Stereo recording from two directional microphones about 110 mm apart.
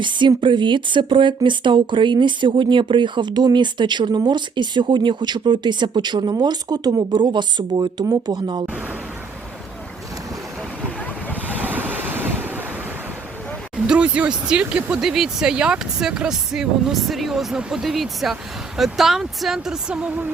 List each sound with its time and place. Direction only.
0.0 s speech: 45° right (ahead or behind)
10.8 s boat: 15° left (ahead or behind)
11.5 s waves: 15° right (ahead or behind)
13.8 s speech: 10° right (ahead or behind)